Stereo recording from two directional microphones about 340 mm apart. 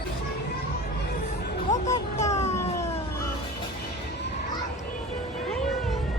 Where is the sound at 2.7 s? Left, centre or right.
Centre.